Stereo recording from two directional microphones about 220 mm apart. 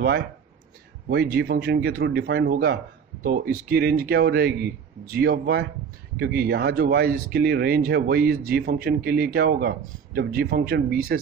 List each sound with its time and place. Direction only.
1.0 s speech: 50° right (ahead or behind)